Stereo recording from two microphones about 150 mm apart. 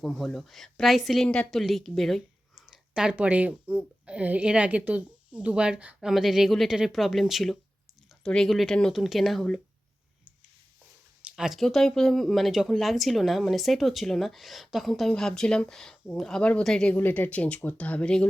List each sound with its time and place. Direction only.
0.0 s a woman's voice: centre (ahead or behind)
11.2 s a woman's voice: 5° right (ahead or behind)